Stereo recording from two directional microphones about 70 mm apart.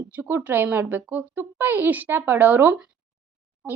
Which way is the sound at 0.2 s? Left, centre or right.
Right.